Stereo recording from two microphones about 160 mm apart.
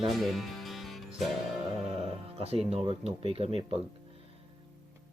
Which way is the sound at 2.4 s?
40° right (ahead or behind).